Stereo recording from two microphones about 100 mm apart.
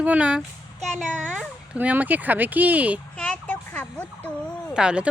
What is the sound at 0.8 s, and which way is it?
Speech, 5° left (ahead or behind).